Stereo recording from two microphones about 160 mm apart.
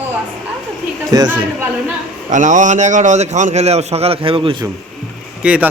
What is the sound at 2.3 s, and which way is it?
A man's voice, 50° right (ahead or behind).